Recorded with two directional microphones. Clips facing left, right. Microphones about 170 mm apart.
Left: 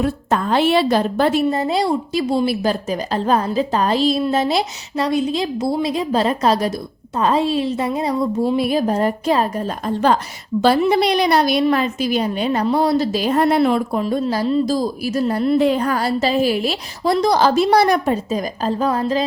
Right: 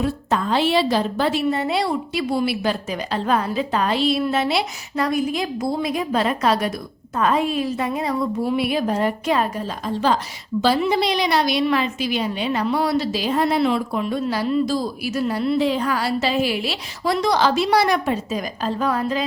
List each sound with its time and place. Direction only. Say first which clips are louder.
0.0 s a woman's voice: left 3 dB; 50° left (ahead or behind)
1.5 s a woman's voice: left 3 dB; 35° left (ahead or behind)
5.0 s a woman's voice: left 3 dB; 25° left (ahead or behind)
10.6 s a woman's voice: left 4 dB; 55° left (ahead or behind); by 13.1 s 35° left (ahead or behind)
13.1 s a woman's voice: left 4 dB; 50° left (ahead or behind); by 19.2 s 30° left (ahead or behind)